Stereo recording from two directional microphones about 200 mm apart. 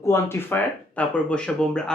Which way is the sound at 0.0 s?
15° left (ahead or behind).